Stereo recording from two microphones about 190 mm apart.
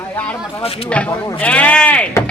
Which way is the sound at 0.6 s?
30° left (ahead or behind).